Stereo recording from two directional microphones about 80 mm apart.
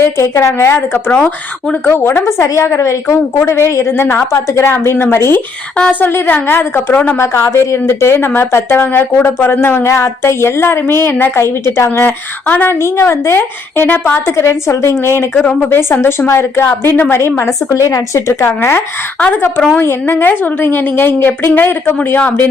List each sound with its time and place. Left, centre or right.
0.0 s a woman's voice: left
1.1 s speech: centre
1.8 s a woman's voice: left
5.7 s a woman's voice: centre
7.2 s a woman's voice: left
12.8 s a woman's voice: left
15.4 s speech: centre
15.7 s a woman's voice: left
19.2 s a woman's voice: left